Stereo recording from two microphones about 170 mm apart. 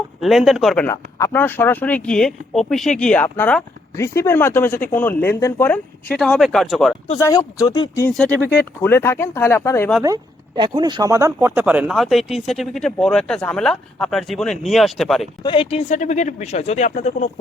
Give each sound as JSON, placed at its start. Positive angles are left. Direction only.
{"t": 0.2, "sound": "speech", "side_deg": 0}
{"t": 0.9, "sound": "speech", "side_deg": 15}
{"t": 7.2, "sound": "speech", "side_deg": 20}
{"t": 8.5, "sound": "speech", "side_deg": 10}
{"t": 10.0, "sound": "speech", "side_deg": -25}
{"t": 15.4, "sound": "speech", "side_deg": 35}